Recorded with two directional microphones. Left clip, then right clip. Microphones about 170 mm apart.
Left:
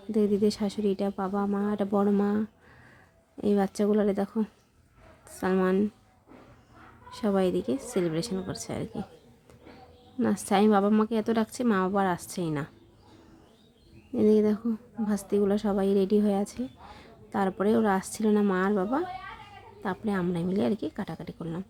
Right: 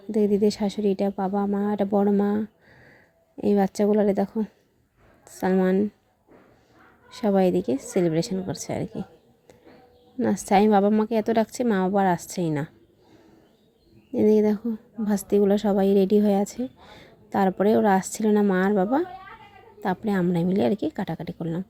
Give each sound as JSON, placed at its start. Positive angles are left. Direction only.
{"t": 0.1, "sound": "a woman's voice", "side_deg": -20}
{"t": 7.1, "sound": "a woman's voice", "side_deg": -20}
{"t": 10.2, "sound": "a woman's voice", "side_deg": -20}
{"t": 14.1, "sound": "a woman's voice", "side_deg": -25}